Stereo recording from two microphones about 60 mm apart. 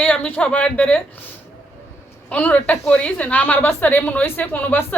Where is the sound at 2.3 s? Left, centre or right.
Left.